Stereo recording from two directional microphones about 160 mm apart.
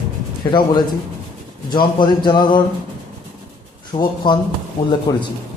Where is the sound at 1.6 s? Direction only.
30° left (ahead or behind).